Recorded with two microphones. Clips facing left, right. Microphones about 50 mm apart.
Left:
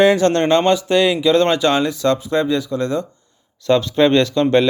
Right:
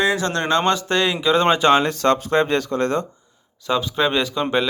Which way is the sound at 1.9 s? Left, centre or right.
Right.